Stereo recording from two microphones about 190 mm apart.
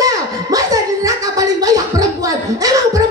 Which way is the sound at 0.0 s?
20° right (ahead or behind).